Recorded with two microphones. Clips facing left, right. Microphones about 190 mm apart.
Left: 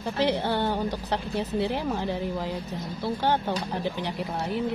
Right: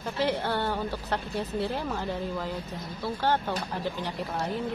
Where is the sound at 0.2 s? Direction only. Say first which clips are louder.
Left 3 dB; 15° left (ahead or behind).